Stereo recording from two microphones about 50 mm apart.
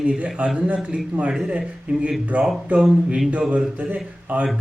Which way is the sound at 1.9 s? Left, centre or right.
Right.